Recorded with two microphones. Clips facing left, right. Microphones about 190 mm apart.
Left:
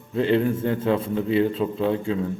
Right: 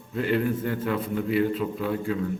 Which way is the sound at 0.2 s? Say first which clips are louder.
Left 4 dB; 25° left (ahead or behind).